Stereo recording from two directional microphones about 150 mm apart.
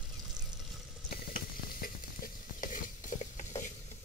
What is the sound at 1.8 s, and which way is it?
Stir, 65° left (ahead or behind).